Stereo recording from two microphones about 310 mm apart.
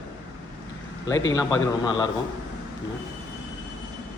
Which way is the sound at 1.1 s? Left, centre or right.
Centre.